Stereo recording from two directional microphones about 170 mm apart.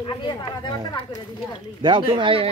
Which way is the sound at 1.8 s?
30° right (ahead or behind).